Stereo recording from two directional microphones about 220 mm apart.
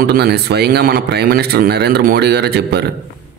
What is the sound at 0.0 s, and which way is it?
Speech, 45° right (ahead or behind).